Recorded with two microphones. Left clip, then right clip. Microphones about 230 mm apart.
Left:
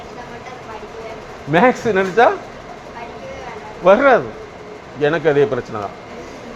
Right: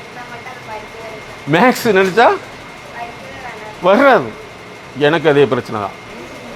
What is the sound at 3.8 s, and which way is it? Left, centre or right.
A man's voice, right.